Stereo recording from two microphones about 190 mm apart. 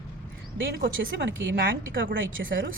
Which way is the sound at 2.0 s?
50° right (ahead or behind).